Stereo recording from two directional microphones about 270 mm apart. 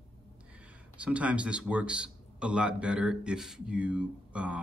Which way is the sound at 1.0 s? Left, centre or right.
Centre.